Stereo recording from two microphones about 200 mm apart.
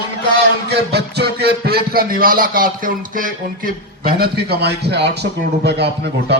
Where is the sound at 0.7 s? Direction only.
55° right (ahead or behind).